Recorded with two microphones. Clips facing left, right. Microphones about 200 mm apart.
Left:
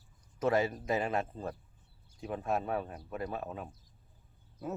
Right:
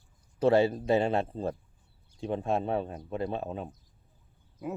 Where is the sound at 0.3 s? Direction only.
30° right (ahead or behind).